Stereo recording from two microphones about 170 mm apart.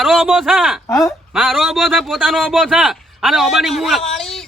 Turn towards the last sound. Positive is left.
turn(degrees=0)  # may be behind; listen again after turning